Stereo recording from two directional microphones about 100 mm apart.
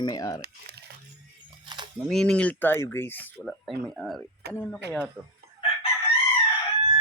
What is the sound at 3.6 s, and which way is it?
Speech, centre (ahead or behind).